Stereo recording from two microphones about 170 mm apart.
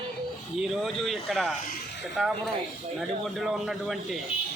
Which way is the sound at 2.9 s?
Centre (ahead or behind).